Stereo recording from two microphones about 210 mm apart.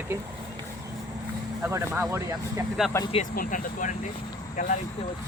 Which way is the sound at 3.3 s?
40° left (ahead or behind).